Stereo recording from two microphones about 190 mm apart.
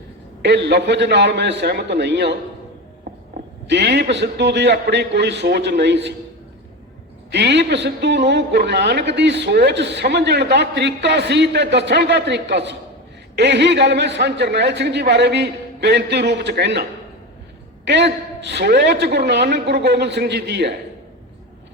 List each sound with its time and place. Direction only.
0.4 s a man's voice: 65° right (ahead or behind)
3.7 s a man's voice: 65° right (ahead or behind)
7.3 s a man's voice: 65° right (ahead or behind)
17.8 s a man's voice: 65° right (ahead or behind)